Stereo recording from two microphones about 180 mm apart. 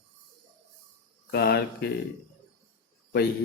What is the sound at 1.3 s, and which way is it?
Speech, 60° left (ahead or behind).